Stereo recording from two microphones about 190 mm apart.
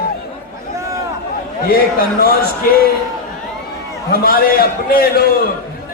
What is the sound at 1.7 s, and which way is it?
Speech, 55° left (ahead or behind).